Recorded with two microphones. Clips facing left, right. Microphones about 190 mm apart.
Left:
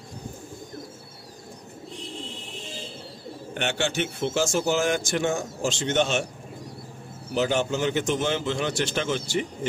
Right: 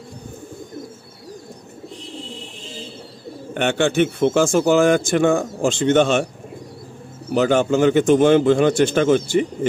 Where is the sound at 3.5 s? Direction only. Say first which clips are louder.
Right 9 dB; 55° right (ahead or behind).